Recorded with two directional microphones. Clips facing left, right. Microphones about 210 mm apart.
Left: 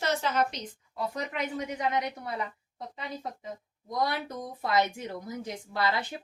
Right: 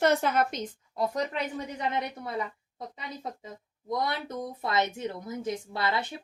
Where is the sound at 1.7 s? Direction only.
25° right (ahead or behind).